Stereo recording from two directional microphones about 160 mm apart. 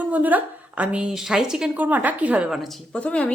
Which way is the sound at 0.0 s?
10° right (ahead or behind).